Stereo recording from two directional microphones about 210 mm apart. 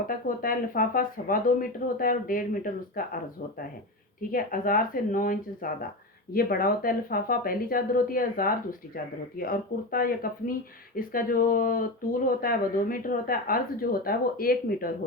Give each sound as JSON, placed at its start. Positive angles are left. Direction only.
{"t": 0.1, "sound": "speech", "side_deg": 40}
{"t": 4.2, "sound": "speech", "side_deg": 40}